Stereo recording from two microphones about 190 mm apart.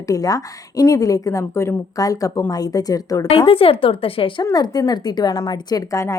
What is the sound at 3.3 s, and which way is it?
Speech, 30° left (ahead or behind).